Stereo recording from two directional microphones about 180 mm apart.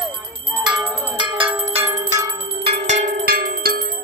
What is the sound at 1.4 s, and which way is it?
Bell, 15° right (ahead or behind).